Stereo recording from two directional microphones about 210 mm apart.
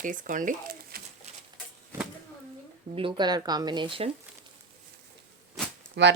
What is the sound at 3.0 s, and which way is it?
Speech, 25° right (ahead or behind).